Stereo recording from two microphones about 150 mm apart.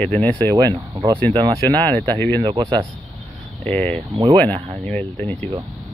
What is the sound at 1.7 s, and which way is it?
Speech, 10° left (ahead or behind).